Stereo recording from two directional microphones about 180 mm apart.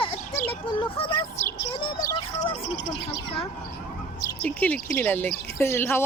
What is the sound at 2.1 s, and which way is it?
Speech, 25° left (ahead or behind).